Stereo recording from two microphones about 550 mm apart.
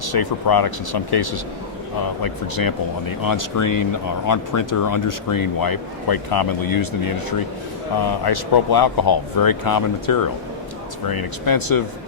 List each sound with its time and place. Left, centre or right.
0.0 s speech: left
7.9 s speech: left